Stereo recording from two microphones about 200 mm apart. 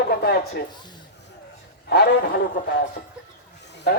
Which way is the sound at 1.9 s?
55° left (ahead or behind).